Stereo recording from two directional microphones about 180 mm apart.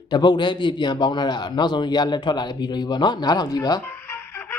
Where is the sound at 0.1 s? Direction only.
25° left (ahead or behind).